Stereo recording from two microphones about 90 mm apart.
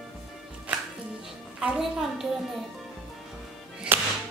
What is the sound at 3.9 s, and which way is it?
Music, 25° right (ahead or behind).